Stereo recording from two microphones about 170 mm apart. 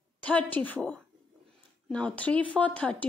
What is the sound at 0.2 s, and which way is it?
Speech, 10° left (ahead or behind).